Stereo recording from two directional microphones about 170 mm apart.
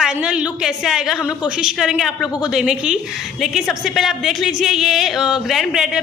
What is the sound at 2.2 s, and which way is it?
Speech, 25° left (ahead or behind).